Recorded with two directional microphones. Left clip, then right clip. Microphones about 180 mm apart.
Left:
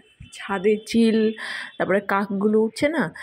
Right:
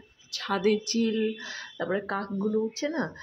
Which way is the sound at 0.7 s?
45° left (ahead or behind).